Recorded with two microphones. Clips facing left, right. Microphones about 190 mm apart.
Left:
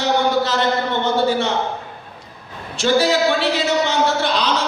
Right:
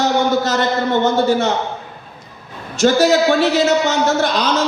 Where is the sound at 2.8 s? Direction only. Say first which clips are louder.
Right 4 dB; 45° right (ahead or behind).